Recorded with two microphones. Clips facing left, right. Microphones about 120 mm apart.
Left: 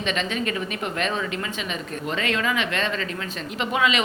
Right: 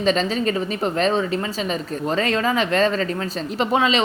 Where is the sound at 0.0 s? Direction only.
35° right (ahead or behind).